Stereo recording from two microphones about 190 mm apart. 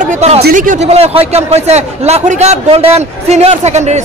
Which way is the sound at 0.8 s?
30° right (ahead or behind).